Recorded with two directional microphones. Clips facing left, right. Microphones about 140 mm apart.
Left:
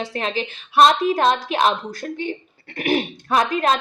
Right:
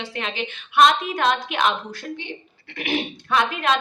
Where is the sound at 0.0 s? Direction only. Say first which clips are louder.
Left 4 dB; 40° left (ahead or behind).